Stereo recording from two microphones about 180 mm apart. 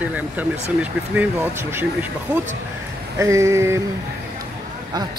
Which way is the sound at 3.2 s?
15° right (ahead or behind).